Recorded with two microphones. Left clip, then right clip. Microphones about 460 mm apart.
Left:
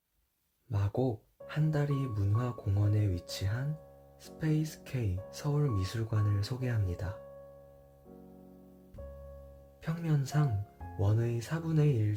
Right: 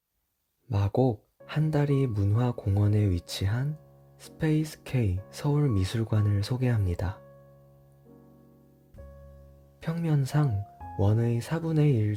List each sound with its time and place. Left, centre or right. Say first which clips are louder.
0.7 s speech: right 7 dB; centre
9.8 s speech: right 5 dB; centre